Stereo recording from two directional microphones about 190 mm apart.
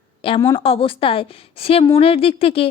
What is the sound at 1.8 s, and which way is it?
Speech, 20° left (ahead or behind).